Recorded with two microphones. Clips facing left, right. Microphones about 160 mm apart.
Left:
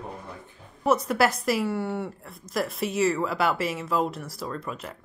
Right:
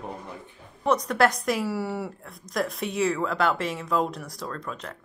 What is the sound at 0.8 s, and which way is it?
A woman's voice, 5° left (ahead or behind).